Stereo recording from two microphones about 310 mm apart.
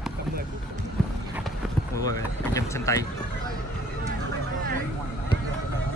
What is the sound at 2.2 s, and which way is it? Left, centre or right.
Speech, centre.